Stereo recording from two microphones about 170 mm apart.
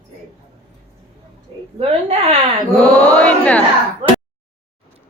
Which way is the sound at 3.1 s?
5° left (ahead or behind).